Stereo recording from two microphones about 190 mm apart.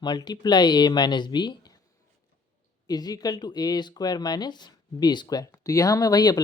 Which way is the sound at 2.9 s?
20° left (ahead or behind).